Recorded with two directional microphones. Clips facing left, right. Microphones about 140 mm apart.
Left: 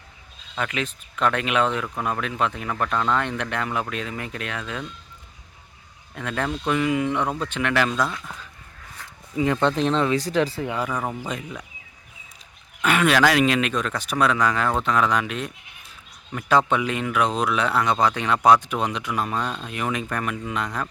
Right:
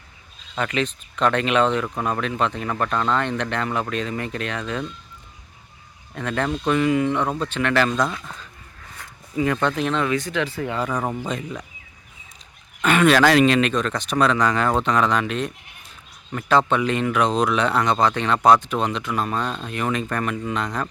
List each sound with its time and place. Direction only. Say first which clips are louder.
0.5 s speech: right 4 dB; 5° left (ahead or behind)
6.1 s speech: right 3 dB; 5° left (ahead or behind)
9.3 s speech: even; 20° left (ahead or behind)
10.6 s speech: right 1 dB; 10° left (ahead or behind)
10.9 s speech: right 3 dB; 10° right (ahead or behind)
11.2 s speech: right 3 dB; 5° left (ahead or behind)
12.8 s speech: right 3 dB; 5° left (ahead or behind)
19.3 s speech: right 2 dB; centre (ahead or behind)